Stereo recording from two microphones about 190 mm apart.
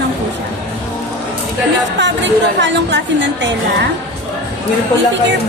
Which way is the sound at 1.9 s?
70° right (ahead or behind).